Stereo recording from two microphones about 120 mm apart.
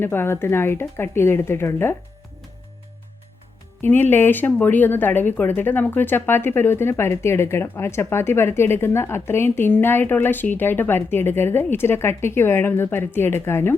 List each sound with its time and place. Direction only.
0.0 s speech: 20° left (ahead or behind)
3.8 s speech: 15° left (ahead or behind)